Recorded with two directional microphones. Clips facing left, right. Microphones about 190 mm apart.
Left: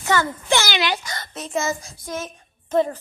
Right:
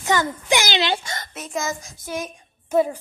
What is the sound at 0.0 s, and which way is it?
A child's voice, 15° right (ahead or behind).